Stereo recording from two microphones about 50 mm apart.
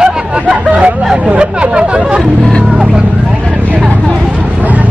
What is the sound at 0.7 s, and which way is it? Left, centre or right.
Speech, right.